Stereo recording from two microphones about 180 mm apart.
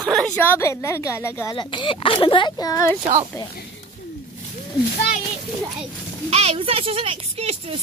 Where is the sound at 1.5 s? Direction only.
25° left (ahead or behind).